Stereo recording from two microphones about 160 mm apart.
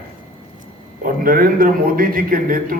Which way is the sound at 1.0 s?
60° right (ahead or behind).